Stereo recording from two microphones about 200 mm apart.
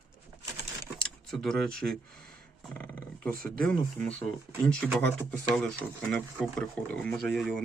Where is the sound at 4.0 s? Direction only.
5° left (ahead or behind).